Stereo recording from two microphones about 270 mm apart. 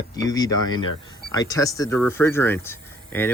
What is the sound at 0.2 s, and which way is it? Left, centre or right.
Speech, centre.